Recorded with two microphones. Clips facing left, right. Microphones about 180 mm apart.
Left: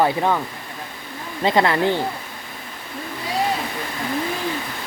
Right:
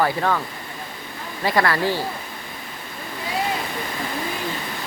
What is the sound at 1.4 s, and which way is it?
Speech, 20° left (ahead or behind).